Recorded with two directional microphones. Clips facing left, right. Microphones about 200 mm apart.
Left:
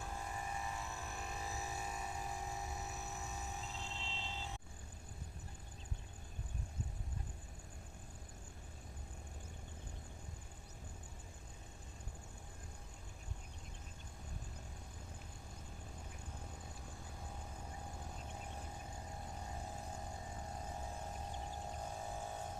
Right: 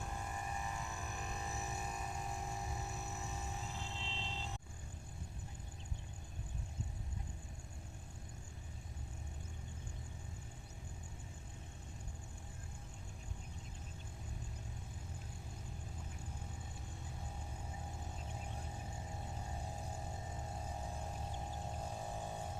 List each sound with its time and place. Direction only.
0.0 s vehicle: centre (ahead or behind)
3.8 s music: 20° right (ahead or behind)